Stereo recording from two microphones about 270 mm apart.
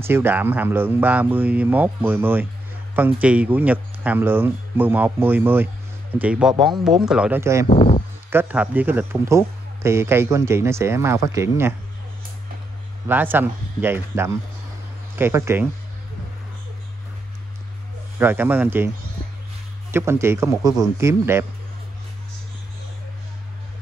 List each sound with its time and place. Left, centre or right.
0.0 s speech: centre
7.6 s speech: left
8.3 s speech: centre
13.1 s speech: centre
18.2 s speech: centre
19.9 s speech: centre